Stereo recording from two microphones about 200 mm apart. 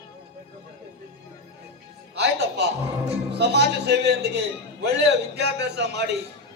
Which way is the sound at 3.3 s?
55° right (ahead or behind).